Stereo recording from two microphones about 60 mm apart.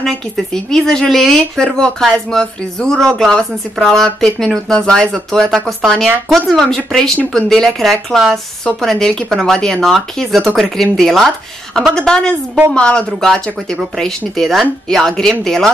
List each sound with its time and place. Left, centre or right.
0.7 s speech: centre
13.2 s speech: centre